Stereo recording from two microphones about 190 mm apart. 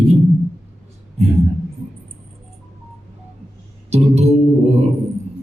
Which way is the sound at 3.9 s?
35° right (ahead or behind).